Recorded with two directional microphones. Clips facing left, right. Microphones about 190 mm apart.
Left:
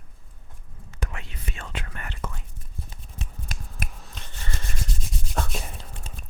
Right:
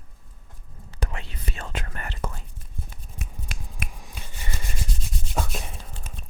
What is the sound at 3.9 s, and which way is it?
Rub, 10° right (ahead or behind).